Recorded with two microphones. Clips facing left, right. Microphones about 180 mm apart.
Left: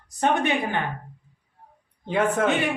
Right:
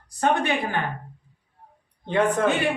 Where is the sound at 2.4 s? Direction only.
20° left (ahead or behind).